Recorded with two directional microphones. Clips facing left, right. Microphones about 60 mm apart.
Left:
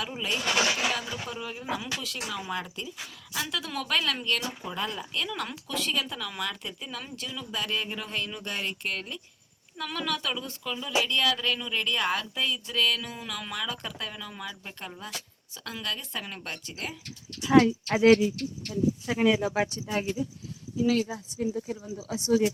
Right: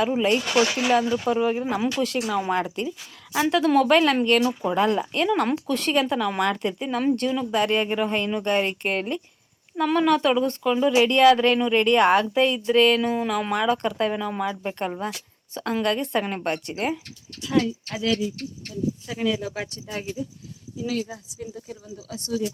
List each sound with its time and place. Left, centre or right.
0.0 s speech: right
17.5 s speech: left
19.0 s speech: left
19.6 s speech: centre
21.3 s speech: left